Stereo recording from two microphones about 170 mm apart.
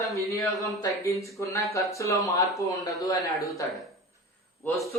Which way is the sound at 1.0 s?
15° left (ahead or behind).